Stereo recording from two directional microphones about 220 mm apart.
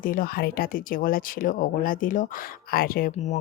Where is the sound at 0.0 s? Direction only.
40° left (ahead or behind).